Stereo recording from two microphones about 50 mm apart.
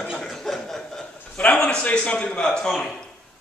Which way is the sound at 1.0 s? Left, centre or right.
Left.